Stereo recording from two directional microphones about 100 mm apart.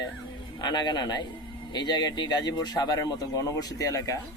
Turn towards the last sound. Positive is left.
turn(degrees=35)  # may be behind; listen again after turning